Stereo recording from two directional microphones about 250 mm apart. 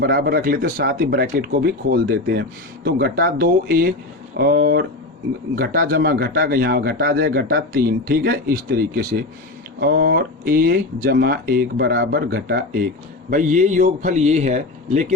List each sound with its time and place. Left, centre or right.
0.0 s a man's voice: right